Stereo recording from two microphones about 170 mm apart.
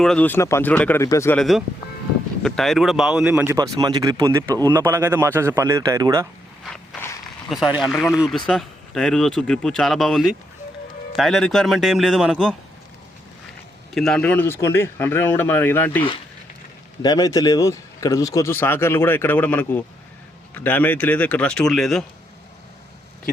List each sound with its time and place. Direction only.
0.0 s a man's voice: 5° left (ahead or behind)
1.4 s speech: centre (ahead or behind)
3.6 s speech: 25° right (ahead or behind)
6.7 s a sound: 5° left (ahead or behind)
7.5 s speech: centre (ahead or behind)
13.9 s a man's voice: 5° left (ahead or behind)
17.0 s a man's voice: 20° left (ahead or behind); by 22.0 s centre (ahead or behind)